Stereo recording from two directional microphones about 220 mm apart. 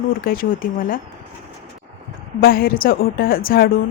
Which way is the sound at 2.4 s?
40° left (ahead or behind).